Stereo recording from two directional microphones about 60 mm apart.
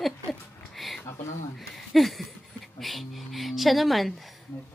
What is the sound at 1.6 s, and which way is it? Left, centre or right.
Speech, centre.